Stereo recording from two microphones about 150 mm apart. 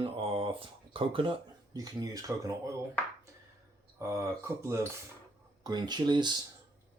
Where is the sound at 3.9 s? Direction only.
20° right (ahead or behind).